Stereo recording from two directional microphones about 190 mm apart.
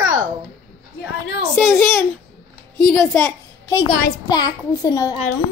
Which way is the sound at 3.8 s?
50° left (ahead or behind).